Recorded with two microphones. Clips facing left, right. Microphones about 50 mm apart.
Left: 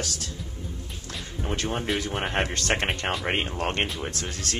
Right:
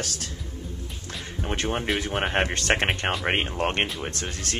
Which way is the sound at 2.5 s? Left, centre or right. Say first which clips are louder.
Right 2 dB; right.